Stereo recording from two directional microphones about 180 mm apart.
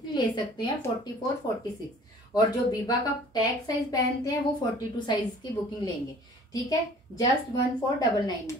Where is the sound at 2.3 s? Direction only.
20° left (ahead or behind).